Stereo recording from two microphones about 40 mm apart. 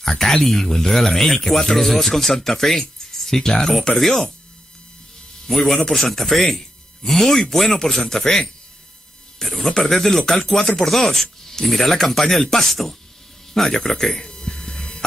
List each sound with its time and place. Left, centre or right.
0.0 s speech: centre
5.5 s a man's voice: centre
14.2 s a sound: centre